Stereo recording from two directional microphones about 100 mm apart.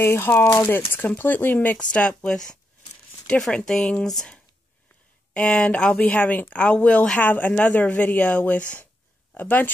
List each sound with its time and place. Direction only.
0.0 s speech: 25° left (ahead or behind)